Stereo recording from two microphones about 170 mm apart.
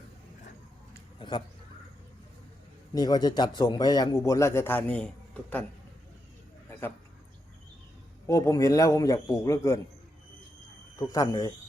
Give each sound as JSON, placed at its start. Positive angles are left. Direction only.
{"t": 1.2, "sound": "a man's voice", "side_deg": 30}
{"t": 2.9, "sound": "a man's voice", "side_deg": 25}
{"t": 6.7, "sound": "a sound", "side_deg": 15}
{"t": 8.3, "sound": "a man's voice", "side_deg": 20}
{"t": 10.9, "sound": "a man's voice", "side_deg": 20}